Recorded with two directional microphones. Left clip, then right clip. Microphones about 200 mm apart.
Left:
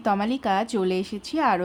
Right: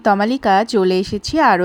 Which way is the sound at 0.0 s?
30° right (ahead or behind).